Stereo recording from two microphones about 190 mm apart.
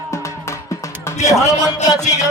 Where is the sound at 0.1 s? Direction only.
15° left (ahead or behind).